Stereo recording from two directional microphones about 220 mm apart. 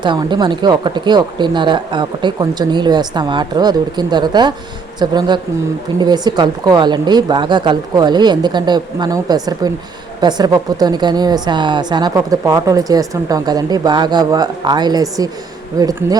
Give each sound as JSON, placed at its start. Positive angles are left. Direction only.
{"t": 0.0, "sound": "a woman's voice", "side_deg": -20}